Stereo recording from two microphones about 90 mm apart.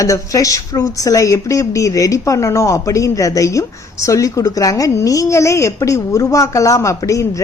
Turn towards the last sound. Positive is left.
turn(degrees=35)  # may be behind; listen again after turning